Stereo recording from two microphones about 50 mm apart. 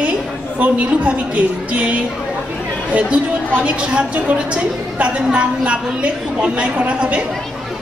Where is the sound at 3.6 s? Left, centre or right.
Right.